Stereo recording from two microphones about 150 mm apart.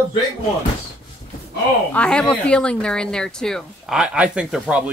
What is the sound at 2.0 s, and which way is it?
Speech, 5° left (ahead or behind).